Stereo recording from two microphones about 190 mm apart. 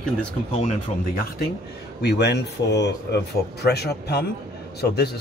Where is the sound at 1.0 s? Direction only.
55° left (ahead or behind).